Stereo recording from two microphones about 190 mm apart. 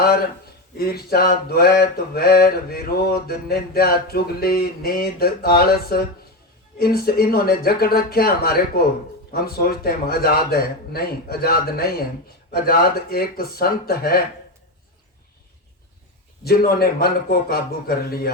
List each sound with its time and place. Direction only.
0.0 s speech: 50° left (ahead or behind)
0.8 s mantra: 55° left (ahead or behind)
16.4 s mantra: 55° left (ahead or behind)